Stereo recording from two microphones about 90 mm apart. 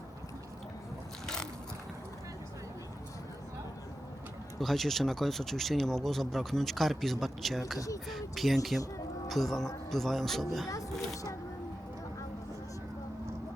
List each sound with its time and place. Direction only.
4.6 s speech: centre (ahead or behind)
11.1 s speech: 40° left (ahead or behind)